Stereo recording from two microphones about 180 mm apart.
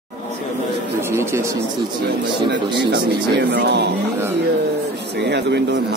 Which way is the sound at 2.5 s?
75° right (ahead or behind).